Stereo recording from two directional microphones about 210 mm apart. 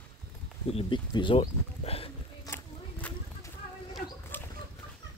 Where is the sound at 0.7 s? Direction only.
25° left (ahead or behind).